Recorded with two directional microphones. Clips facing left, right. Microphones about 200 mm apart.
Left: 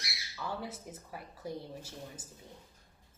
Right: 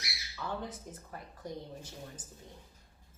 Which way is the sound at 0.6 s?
10° left (ahead or behind).